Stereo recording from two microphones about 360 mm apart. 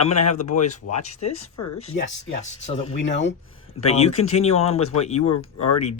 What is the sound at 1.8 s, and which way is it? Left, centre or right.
Speech, centre.